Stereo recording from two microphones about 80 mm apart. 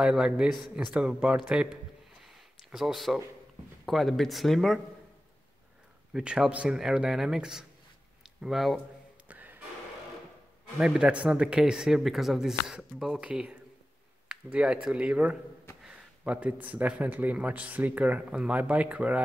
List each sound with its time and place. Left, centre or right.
0.0 s speech: centre
2.2 s a sound: centre
3.8 s speech: centre
6.1 s speech: centre
9.3 s music: right
10.8 s a man's voice: centre